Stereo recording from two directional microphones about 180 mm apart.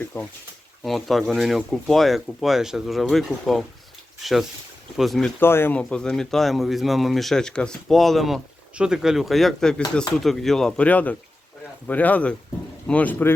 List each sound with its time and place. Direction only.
0.0 s speech: 10° left (ahead or behind)
5.4 s speech: 10° left (ahead or behind)